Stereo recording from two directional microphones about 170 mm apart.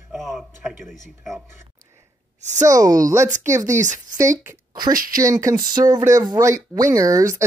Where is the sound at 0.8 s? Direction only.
Centre (ahead or behind).